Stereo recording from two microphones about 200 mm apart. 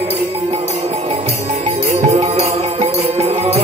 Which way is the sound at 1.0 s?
30° right (ahead or behind).